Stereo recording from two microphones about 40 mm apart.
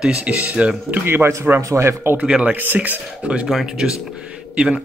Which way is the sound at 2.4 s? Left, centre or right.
Right.